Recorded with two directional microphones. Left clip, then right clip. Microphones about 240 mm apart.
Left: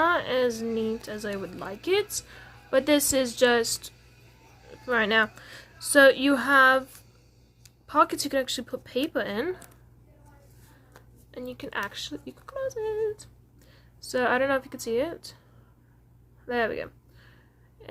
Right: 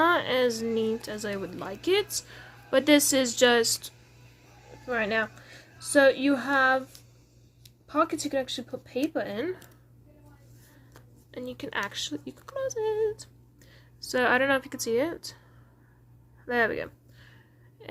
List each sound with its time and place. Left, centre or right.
0.0 s speech: centre
4.9 s speech: centre
10.9 s speech: centre
16.5 s a sound: centre